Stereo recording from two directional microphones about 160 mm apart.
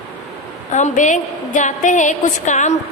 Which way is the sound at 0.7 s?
50° left (ahead or behind).